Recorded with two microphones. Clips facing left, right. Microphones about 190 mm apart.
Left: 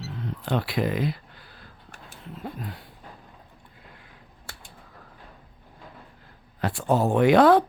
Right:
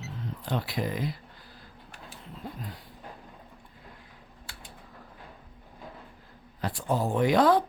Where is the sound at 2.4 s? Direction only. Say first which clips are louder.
Left 4 dB; 65° left (ahead or behind).